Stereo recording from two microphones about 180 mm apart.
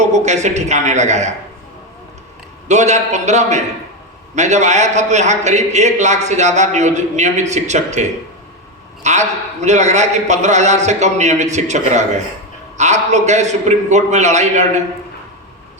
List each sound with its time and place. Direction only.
0.0 s a man's voice: 40° right (ahead or behind)
2.6 s a man's voice: 40° right (ahead or behind)
9.0 s a man's voice: 40° right (ahead or behind)